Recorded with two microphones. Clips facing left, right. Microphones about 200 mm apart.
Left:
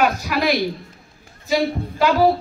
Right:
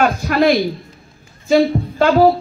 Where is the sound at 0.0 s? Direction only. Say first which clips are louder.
Right 5 dB; 50° right (ahead or behind).